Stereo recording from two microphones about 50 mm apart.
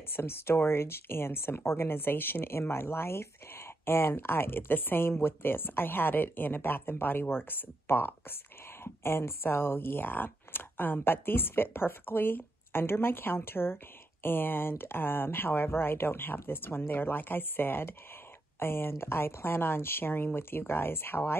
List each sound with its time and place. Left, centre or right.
0.1 s speech: left